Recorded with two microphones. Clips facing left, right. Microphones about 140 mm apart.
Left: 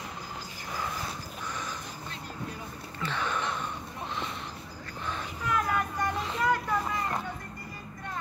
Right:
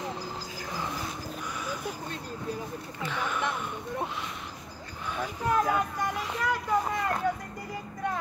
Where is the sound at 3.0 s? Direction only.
10° right (ahead or behind).